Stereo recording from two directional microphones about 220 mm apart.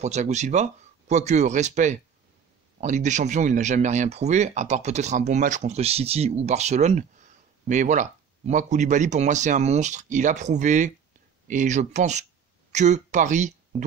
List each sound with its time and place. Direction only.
0.0 s speech: 30° right (ahead or behind)